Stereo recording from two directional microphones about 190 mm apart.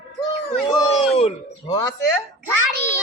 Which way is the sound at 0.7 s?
30° left (ahead or behind).